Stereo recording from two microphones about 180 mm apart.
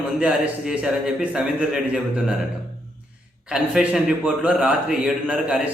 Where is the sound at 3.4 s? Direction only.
5° right (ahead or behind).